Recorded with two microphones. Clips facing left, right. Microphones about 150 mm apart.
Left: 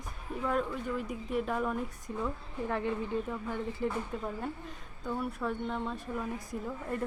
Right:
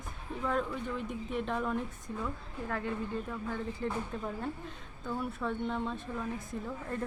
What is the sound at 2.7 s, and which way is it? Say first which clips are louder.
A woman's voice: left 3 dB; 15° left (ahead or behind).